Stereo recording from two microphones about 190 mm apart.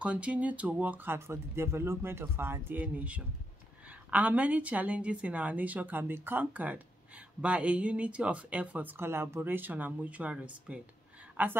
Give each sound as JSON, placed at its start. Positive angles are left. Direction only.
{"t": 0.0, "sound": "a woman's voice", "side_deg": -5}